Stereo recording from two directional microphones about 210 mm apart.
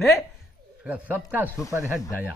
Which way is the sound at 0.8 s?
5° right (ahead or behind).